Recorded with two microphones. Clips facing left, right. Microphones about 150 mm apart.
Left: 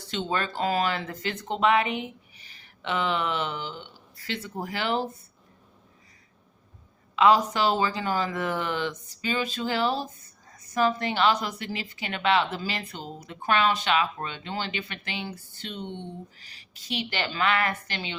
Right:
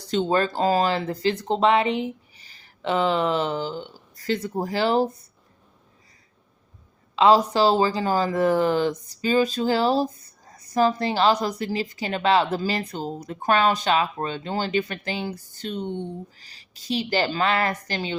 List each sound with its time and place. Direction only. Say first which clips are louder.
0.0 s speech: right 7 dB; 40° right (ahead or behind)
7.2 s speech: right 4 dB; 30° right (ahead or behind)